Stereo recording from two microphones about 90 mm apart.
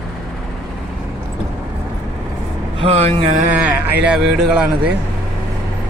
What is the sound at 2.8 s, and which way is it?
Speech, 80° right.